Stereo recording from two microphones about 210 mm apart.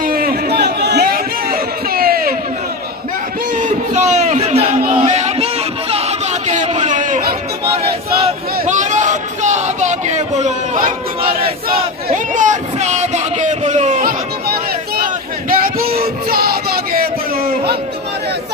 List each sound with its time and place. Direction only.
0.0 s chatter: 45° right (ahead or behind)
3.5 s a sound: 35° right (ahead or behind)
15.6 s child singing: 45° right (ahead or behind)